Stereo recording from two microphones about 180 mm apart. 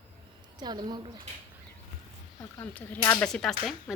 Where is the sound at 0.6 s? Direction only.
25° right (ahead or behind).